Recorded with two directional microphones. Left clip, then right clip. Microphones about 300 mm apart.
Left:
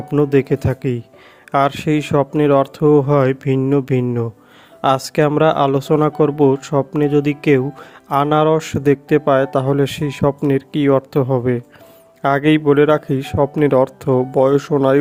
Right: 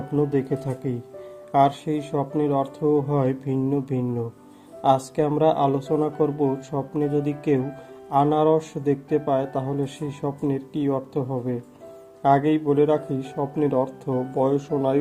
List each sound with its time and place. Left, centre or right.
0.1 s a man's voice: left